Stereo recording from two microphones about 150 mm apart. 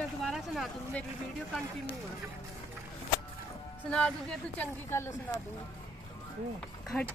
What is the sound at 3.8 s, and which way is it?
Speech, 5° left (ahead or behind).